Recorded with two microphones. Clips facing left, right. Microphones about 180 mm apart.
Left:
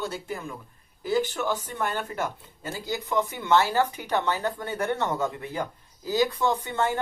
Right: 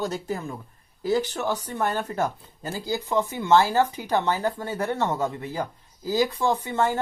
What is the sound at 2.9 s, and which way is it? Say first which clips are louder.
Speech: right 2 dB; 25° right (ahead or behind).